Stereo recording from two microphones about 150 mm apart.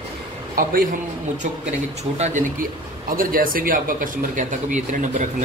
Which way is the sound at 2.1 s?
45° right (ahead or behind).